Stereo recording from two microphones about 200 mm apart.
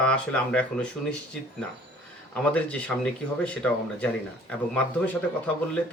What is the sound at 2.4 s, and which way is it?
Speech, 5° left (ahead or behind).